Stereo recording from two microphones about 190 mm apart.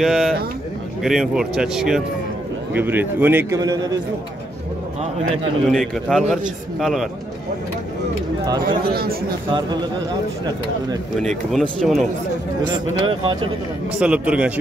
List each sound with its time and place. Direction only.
0.0 s a man's voice: centre (ahead or behind); by 3.7 s 15° right (ahead or behind)
5.7 s a man's voice: centre (ahead or behind)
8.6 s speech: 50° right (ahead or behind)
9.5 s speech: 20° right (ahead or behind)
11.1 s a man's voice: centre (ahead or behind)
13.0 s speech: 25° right (ahead or behind)
13.9 s a man's voice: 5° right (ahead or behind)